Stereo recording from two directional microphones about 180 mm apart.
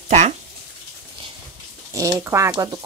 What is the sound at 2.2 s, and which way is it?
Speech, 15° right (ahead or behind).